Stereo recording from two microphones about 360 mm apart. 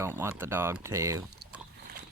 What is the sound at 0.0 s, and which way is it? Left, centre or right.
Speech, centre.